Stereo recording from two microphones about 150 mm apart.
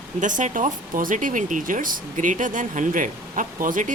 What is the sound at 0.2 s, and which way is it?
Speech, 55° right (ahead or behind).